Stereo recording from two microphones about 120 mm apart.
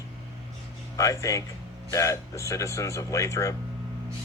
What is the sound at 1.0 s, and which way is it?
Speech, 30° left (ahead or behind).